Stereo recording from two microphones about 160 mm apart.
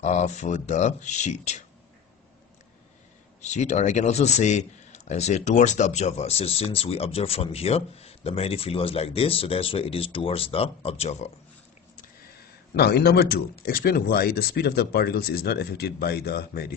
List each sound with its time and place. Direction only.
0.0 s speech: 45° left (ahead or behind)
3.3 s speech: 45° left (ahead or behind)
12.7 s speech: 85° left